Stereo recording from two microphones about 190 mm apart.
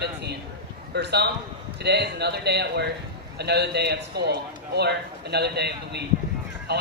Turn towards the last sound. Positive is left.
turn(degrees=-60)  # may be behind; listen again after turning